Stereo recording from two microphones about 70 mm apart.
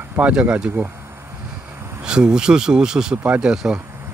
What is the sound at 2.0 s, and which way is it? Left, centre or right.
Speech, centre.